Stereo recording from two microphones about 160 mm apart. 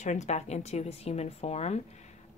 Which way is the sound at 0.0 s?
45° left (ahead or behind).